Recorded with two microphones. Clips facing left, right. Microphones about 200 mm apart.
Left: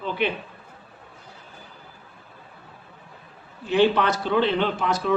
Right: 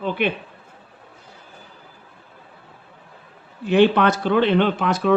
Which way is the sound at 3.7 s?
55° right (ahead or behind).